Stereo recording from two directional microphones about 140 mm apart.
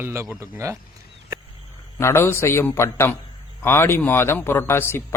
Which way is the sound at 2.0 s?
20° left (ahead or behind).